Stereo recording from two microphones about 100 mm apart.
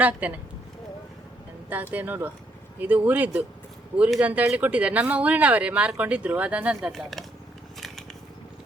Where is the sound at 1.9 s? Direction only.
20° right (ahead or behind); by 7.2 s centre (ahead or behind).